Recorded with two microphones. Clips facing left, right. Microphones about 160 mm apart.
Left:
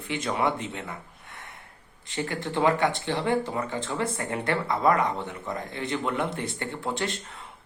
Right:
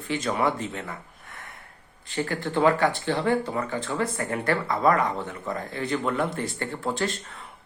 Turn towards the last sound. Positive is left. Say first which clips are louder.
# right 2 dB
turn(degrees=20)  # may be behind; listen again after turning